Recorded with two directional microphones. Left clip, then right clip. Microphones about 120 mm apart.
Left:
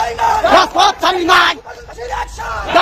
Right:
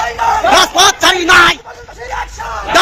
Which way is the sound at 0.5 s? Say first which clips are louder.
Right 3 dB; 5° left (ahead or behind).